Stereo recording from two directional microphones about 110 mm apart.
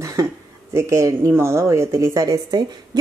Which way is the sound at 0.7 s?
25° right (ahead or behind).